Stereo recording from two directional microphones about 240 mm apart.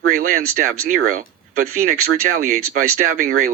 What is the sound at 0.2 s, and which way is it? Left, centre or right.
Speech, right.